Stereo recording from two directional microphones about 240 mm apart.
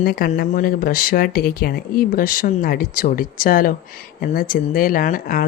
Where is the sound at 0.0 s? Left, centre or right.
Left.